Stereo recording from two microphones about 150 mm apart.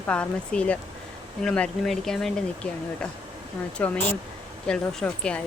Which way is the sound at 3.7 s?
5° left (ahead or behind).